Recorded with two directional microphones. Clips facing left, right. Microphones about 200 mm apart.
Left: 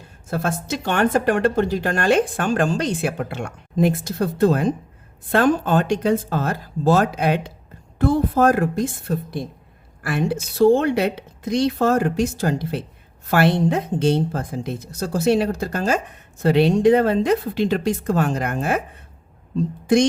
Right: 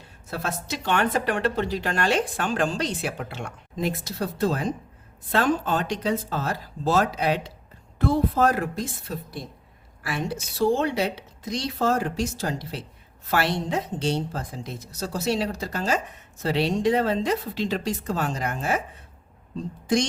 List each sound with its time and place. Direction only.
0.3 s a woman's voice: 50° left (ahead or behind)